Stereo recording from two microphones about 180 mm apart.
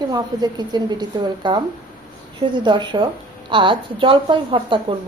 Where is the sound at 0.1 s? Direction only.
20° right (ahead or behind).